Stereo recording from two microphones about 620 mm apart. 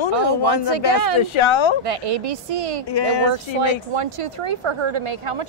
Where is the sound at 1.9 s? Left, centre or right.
Right.